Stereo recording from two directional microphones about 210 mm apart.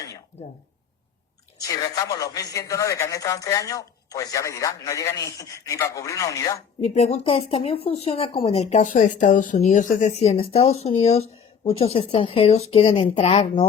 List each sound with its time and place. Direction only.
1.5 s a man's voice: 15° left (ahead or behind)
6.8 s a woman's voice: 30° left (ahead or behind)